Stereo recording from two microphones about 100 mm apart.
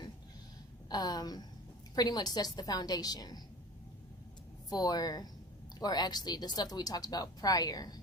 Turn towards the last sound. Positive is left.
turn(degrees=40)  # may be behind; listen again after turning